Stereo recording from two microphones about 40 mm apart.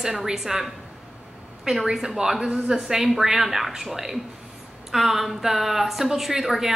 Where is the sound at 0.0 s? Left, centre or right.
Centre.